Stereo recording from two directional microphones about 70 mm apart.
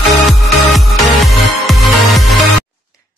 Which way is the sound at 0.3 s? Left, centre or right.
Centre.